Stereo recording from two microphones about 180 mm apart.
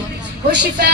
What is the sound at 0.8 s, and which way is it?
Speech, 65° right (ahead or behind).